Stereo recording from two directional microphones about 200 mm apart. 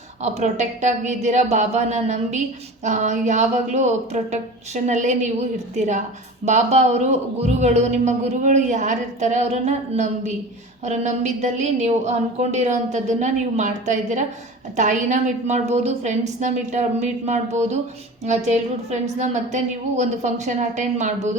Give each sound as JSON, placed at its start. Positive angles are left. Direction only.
{"t": 0.2, "sound": "speech", "side_deg": -35}